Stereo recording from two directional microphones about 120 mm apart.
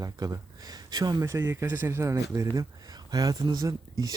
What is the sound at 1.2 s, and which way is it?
Speech, 20° right (ahead or behind).